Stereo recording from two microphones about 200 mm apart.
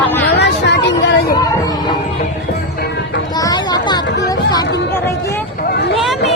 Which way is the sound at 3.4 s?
20° left (ahead or behind).